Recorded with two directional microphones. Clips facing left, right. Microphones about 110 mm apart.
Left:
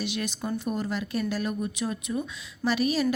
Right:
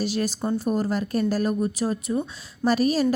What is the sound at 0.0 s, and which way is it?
Speech, 35° right (ahead or behind).